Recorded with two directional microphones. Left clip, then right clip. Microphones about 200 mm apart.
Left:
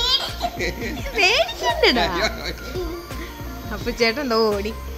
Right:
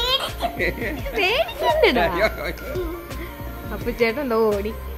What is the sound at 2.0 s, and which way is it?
Speech, 15° right (ahead or behind).